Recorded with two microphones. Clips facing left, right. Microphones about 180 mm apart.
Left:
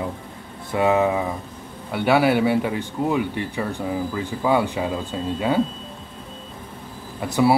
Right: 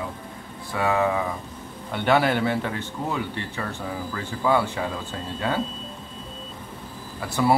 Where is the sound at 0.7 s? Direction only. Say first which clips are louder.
Left 4 dB; 20° left (ahead or behind).